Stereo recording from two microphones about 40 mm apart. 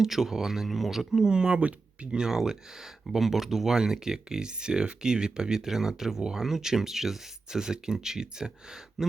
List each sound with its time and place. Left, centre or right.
0.0 s speech: centre
1.2 s speech: right
2.1 s speech: centre